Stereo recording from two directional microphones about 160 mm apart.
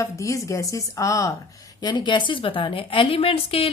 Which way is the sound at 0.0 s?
20° left (ahead or behind).